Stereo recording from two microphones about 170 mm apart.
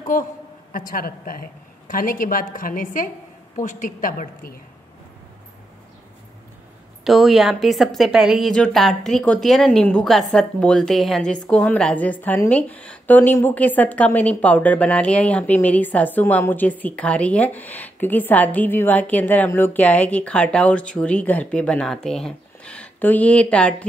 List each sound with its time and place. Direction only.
0.0 s a man's voice: 50° left (ahead or behind)
7.1 s a woman's voice: centre (ahead or behind)